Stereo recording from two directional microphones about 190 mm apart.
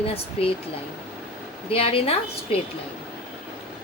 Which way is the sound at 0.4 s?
30° left (ahead or behind).